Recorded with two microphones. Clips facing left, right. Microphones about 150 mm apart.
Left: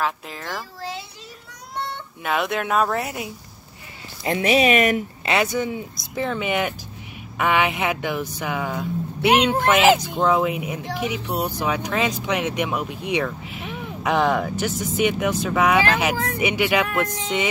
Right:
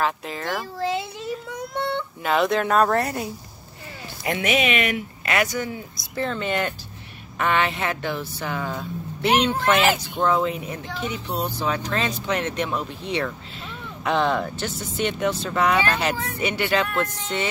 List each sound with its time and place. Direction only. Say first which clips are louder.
0.0 s a child's voice: right 2 dB; centre (ahead or behind)
2.2 s speech: right 2 dB; centre (ahead or behind)
4.2 s speech: left 4 dB; 30° left (ahead or behind)
5.2 s speech: left 1 dB; 25° left (ahead or behind)